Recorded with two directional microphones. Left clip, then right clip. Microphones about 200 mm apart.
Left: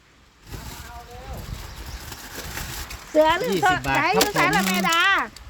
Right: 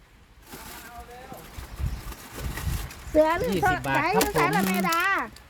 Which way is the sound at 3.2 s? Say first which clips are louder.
Left 3 dB; 10° left (ahead or behind).